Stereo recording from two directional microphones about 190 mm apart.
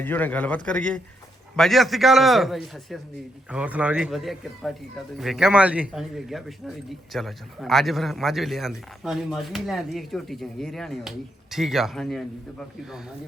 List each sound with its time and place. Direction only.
0.0 s a man's voice: 10° left (ahead or behind)